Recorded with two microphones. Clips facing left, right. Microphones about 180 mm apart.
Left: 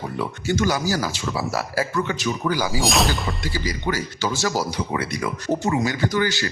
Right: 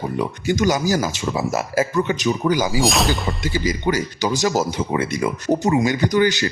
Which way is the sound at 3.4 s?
20° right (ahead or behind).